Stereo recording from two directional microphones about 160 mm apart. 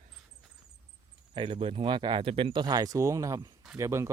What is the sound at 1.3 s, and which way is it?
Speech, 30° right (ahead or behind).